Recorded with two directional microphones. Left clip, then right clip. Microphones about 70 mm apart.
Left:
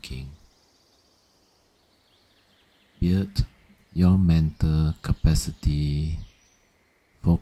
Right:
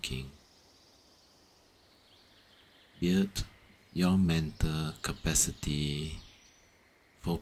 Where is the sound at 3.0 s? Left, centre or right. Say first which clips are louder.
Left 3 dB; left.